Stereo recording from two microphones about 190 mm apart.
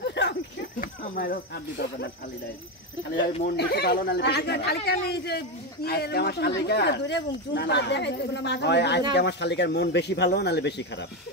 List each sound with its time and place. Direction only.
0.0 s a sound: 65° left (ahead or behind)
0.7 s speech: 50° left (ahead or behind)
3.4 s speech: 60° left (ahead or behind)